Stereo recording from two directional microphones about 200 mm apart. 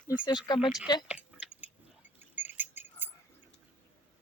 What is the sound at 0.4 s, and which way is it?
Speech, 25° left (ahead or behind).